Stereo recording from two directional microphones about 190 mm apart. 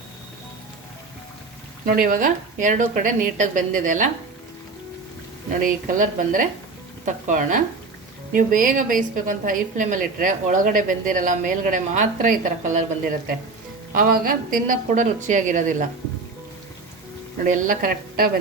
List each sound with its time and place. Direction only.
1.9 s a woman's voice: 45° right (ahead or behind)
5.5 s a woman's voice: 45° right (ahead or behind)
13.9 s a woman's voice: 50° right (ahead or behind)
17.4 s a woman's voice: 45° right (ahead or behind)